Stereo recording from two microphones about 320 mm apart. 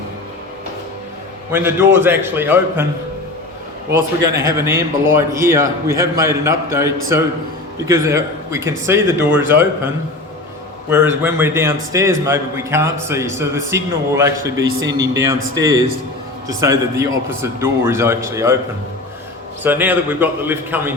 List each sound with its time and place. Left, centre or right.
1.5 s a man's voice: centre
3.9 s a man's voice: centre
19.6 s a man's voice: centre